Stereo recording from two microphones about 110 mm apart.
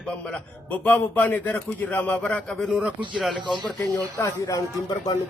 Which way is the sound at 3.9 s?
30° left (ahead or behind).